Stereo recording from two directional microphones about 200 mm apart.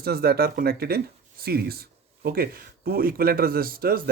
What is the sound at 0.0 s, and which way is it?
Speech, 50° right (ahead or behind).